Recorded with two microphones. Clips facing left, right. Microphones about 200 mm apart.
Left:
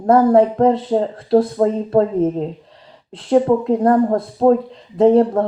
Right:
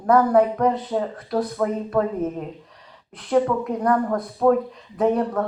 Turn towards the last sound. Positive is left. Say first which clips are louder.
# left 8 dB
turn(degrees=25)  # may be behind; listen again after turning